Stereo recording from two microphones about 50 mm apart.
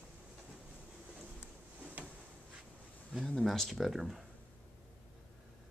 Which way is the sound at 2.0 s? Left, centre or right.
Right.